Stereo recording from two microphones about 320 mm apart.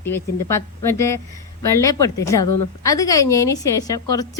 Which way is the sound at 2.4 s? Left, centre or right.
Left.